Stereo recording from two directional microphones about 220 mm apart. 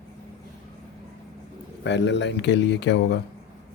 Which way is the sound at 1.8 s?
55° left (ahead or behind).